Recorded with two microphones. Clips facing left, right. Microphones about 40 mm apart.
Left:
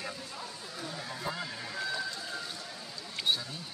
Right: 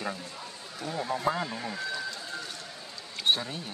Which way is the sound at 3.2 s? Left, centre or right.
Right.